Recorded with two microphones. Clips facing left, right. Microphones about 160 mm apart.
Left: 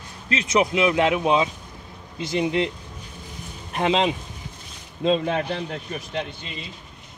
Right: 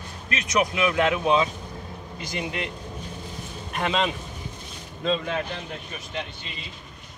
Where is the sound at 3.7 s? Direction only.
20° left (ahead or behind).